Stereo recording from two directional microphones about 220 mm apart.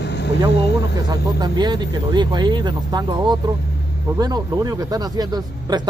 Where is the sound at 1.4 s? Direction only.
20° right (ahead or behind).